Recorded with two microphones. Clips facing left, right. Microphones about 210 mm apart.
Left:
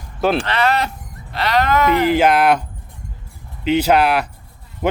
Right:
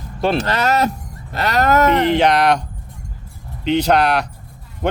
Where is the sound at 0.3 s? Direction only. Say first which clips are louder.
Right 1 dB; 40° right (ahead or behind).